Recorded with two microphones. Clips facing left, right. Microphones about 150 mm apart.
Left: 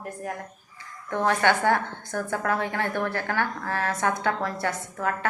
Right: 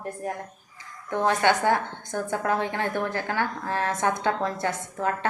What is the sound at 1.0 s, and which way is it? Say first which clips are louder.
A woman's voice: even; 15° right (ahead or behind).